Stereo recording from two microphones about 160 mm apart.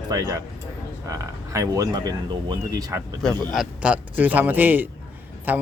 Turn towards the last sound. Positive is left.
turn(degrees=-10)  # may be behind; listen again after turning